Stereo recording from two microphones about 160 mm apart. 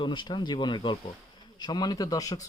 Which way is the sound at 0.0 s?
30° left (ahead or behind).